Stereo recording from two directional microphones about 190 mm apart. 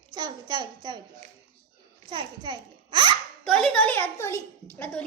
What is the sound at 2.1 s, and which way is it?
A child's voice, 25° right (ahead or behind).